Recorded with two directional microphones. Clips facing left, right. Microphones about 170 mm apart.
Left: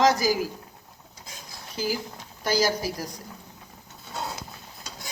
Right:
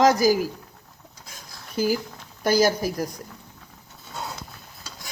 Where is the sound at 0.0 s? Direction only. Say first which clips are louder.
Right 4 dB; 45° right (ahead or behind).